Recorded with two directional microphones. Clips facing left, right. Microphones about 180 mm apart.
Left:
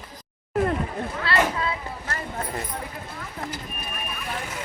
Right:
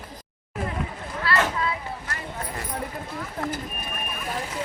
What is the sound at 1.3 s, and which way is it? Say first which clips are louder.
Boat: even; 25° left (ahead or behind).